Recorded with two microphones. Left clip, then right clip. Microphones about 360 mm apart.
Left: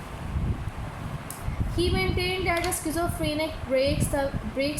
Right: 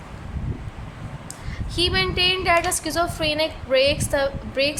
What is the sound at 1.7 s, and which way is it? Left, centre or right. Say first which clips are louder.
A woman's voice: right 6 dB; right.